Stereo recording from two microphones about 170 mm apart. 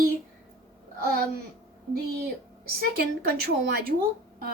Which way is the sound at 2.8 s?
65° right (ahead or behind).